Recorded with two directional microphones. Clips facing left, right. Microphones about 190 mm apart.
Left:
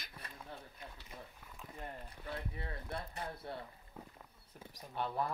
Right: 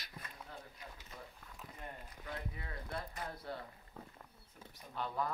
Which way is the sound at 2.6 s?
30° left (ahead or behind).